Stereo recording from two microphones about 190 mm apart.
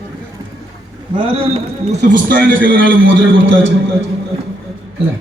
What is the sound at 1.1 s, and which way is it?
Speech, 30° right (ahead or behind).